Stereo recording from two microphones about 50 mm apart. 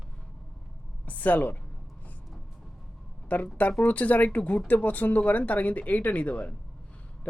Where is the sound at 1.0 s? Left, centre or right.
Left.